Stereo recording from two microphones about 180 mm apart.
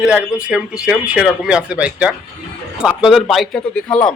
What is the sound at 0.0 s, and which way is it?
Speech, 5° right (ahead or behind).